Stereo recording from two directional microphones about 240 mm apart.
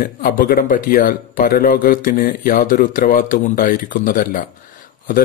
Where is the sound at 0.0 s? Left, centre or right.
Left.